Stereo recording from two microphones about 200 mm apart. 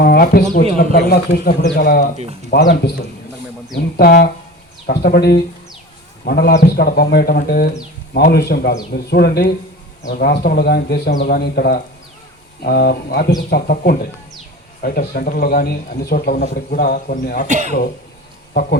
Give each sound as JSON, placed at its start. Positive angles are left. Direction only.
{"t": 0.0, "sound": "speech", "side_deg": 50}
{"t": 3.9, "sound": "speech", "side_deg": 45}
{"t": 17.5, "sound": "speech", "side_deg": -40}